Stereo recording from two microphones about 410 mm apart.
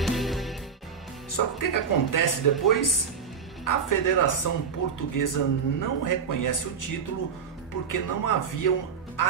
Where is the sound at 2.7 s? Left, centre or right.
Left.